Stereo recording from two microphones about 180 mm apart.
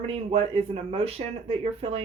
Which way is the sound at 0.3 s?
30° right (ahead or behind).